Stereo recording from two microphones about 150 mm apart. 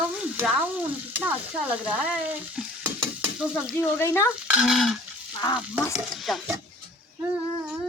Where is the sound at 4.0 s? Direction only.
15° left (ahead or behind).